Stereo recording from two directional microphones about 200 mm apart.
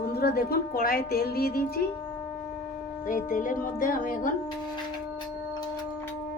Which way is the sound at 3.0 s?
40° left (ahead or behind).